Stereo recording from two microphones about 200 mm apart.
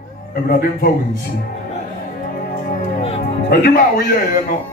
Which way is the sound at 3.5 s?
45° left (ahead or behind).